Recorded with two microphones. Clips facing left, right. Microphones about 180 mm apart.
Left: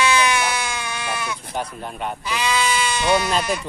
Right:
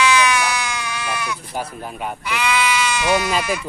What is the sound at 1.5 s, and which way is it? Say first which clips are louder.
Speech: even; 5° right (ahead or behind).